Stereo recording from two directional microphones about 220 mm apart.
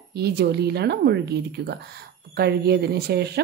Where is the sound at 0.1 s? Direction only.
45° right (ahead or behind).